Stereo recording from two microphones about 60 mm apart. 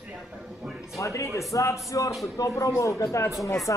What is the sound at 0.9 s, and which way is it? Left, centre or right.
Speech, left.